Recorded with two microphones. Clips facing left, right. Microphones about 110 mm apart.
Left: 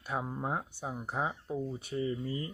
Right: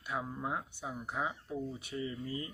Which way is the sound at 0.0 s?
35° left (ahead or behind).